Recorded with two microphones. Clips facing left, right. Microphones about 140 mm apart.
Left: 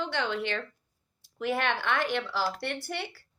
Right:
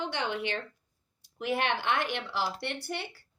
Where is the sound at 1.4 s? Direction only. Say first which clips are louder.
Left 1 dB; 55° left (ahead or behind).